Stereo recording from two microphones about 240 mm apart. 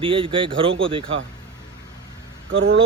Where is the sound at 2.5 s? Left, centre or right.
Right.